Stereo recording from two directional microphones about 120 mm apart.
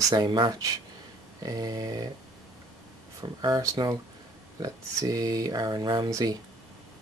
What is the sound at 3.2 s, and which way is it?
Speech, 35° right (ahead or behind).